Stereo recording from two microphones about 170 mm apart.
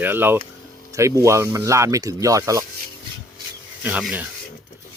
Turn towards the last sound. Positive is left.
turn(degrees=-10)  # may be behind; listen again after turning